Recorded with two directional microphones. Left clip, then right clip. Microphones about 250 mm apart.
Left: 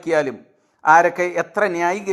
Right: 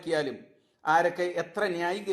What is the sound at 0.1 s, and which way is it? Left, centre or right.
A man's voice, left.